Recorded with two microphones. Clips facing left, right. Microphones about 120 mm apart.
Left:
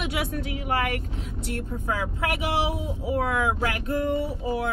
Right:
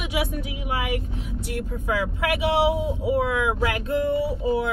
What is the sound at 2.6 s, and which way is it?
Speech, 20° right (ahead or behind).